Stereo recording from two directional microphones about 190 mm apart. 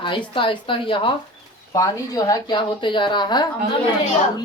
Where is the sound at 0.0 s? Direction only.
25° left (ahead or behind).